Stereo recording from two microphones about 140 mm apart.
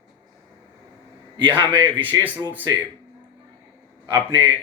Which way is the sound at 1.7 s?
15° right (ahead or behind).